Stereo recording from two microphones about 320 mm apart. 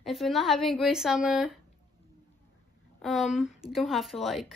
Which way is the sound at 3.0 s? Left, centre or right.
Centre.